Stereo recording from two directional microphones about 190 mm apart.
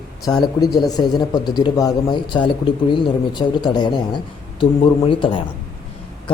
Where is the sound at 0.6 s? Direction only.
20° left (ahead or behind).